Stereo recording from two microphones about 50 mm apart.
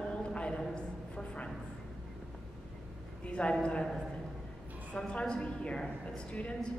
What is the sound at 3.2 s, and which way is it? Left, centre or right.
Speech, left.